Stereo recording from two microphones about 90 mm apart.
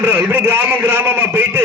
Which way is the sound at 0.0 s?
25° right (ahead or behind).